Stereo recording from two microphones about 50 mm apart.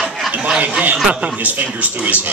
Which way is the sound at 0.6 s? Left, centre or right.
Right.